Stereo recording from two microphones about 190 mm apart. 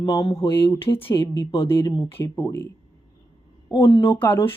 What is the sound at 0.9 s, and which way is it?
Speech, 10° left (ahead or behind).